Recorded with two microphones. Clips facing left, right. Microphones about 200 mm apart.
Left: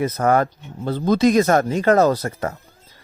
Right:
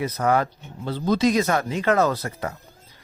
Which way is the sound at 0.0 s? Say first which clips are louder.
Left 4 dB; 50° left (ahead or behind).